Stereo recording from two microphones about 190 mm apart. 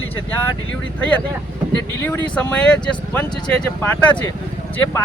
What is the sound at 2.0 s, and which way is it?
Speech, 10° left (ahead or behind).